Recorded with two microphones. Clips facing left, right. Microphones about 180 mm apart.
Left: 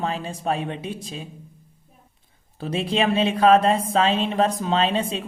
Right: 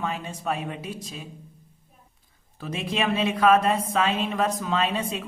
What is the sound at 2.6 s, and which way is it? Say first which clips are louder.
Speech: left 5 dB; 30° left (ahead or behind).